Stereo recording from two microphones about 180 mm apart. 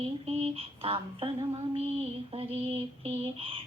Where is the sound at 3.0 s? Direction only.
30° right (ahead or behind).